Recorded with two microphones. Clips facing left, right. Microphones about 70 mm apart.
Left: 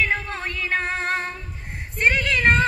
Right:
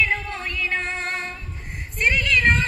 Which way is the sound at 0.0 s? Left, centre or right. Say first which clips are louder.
Even; left.